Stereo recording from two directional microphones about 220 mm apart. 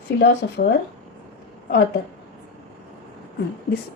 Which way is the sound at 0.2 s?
45° left (ahead or behind).